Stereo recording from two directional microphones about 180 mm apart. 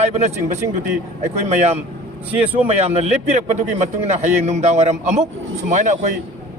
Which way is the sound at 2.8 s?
40° right (ahead or behind).